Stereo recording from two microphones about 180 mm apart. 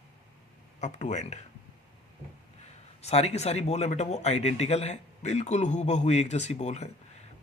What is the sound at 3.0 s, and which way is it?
Speech, 35° left (ahead or behind).